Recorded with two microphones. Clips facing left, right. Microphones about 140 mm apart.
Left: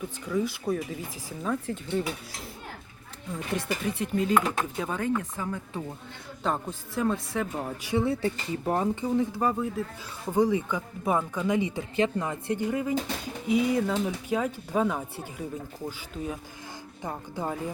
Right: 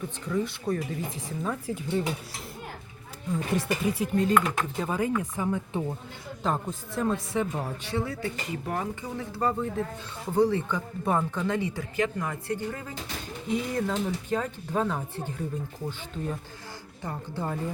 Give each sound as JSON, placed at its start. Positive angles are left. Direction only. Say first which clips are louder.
{"t": 0.3, "sound": "speech", "louder": "left 1 dB", "side_deg": 5}
{"t": 3.3, "sound": "speech", "louder": "right 3 dB", "side_deg": 0}
{"t": 6.4, "sound": "speech", "louder": "even", "side_deg": 0}
{"t": 8.0, "sound": "speech", "louder": "left 5 dB", "side_deg": 30}
{"t": 9.0, "sound": "speech", "louder": "left 4 dB", "side_deg": 15}
{"t": 13.5, "sound": "speech", "louder": "left 4 dB", "side_deg": 5}